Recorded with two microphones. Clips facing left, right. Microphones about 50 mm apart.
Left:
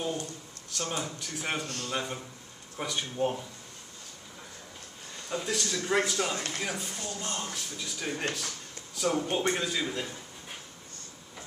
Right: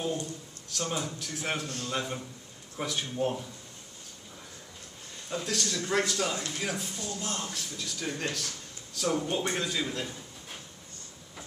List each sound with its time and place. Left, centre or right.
0.7 s a man's voice: centre
5.3 s speech: centre
6.3 s speech: left
6.6 s a man's voice: centre